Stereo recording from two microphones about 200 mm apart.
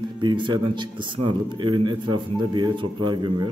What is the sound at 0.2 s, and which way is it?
Speech, 20° right (ahead or behind).